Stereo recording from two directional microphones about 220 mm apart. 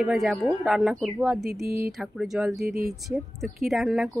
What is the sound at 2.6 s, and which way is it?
Speech, 45° right (ahead or behind).